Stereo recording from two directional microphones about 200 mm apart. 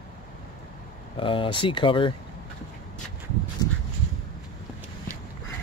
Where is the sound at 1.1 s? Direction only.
25° left (ahead or behind).